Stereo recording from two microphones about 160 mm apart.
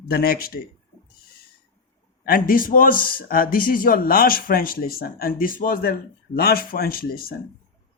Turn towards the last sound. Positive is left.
turn(degrees=65)  # may be behind; listen again after turning